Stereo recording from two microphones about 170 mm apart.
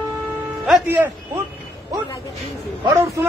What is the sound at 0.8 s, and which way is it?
Speech, 10° right (ahead or behind).